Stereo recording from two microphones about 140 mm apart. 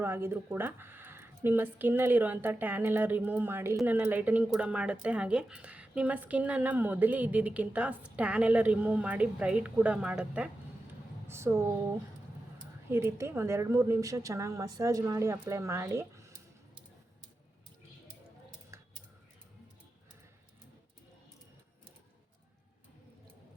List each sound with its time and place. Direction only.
0.0 s a woman's voice: 15° right (ahead or behind)
12.9 s a woman's voice: 15° right (ahead or behind)
18.7 s a sound: 20° right (ahead or behind)